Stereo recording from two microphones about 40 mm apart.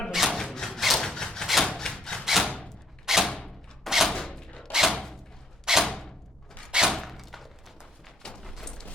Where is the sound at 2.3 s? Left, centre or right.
Centre.